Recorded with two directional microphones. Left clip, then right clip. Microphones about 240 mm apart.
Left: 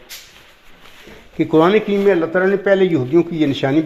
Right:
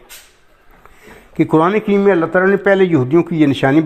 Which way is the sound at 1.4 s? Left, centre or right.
Right.